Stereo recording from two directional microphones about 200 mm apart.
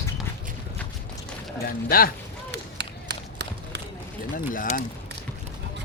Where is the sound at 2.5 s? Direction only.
60° right (ahead or behind).